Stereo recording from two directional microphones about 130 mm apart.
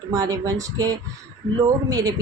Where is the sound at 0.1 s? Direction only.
25° right (ahead or behind).